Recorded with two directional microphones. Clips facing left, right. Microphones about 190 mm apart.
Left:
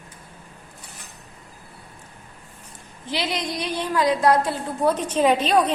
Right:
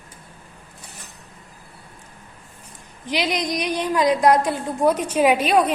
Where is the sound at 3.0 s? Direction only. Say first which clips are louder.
Right 3 dB; 15° right (ahead or behind).